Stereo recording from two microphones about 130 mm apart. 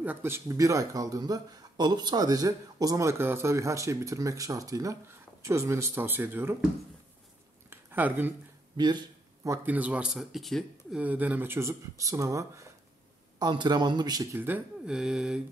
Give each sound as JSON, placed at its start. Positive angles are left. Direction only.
{"t": 0.0, "sound": "speech", "side_deg": -15}
{"t": 7.7, "sound": "a sound", "side_deg": -15}
{"t": 8.7, "sound": "a sound", "side_deg": -35}
{"t": 9.7, "sound": "speech", "side_deg": -10}
{"t": 11.0, "sound": "speech", "side_deg": -10}
{"t": 14.3, "sound": "speech", "side_deg": -15}
{"t": 14.9, "sound": "speech", "side_deg": -5}